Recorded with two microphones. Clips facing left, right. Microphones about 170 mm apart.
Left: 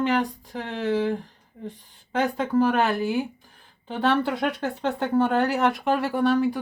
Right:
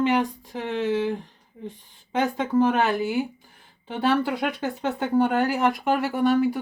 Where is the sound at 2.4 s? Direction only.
15° right (ahead or behind).